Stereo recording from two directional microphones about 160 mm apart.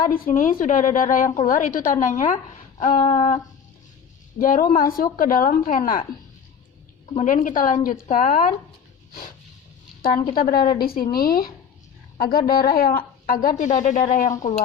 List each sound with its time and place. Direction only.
0.0 s a woman's voice: 60° left (ahead or behind)
4.4 s a woman's voice: 60° left (ahead or behind)
7.1 s a woman's voice: 50° left (ahead or behind)
10.2 s a woman's voice: 70° left (ahead or behind)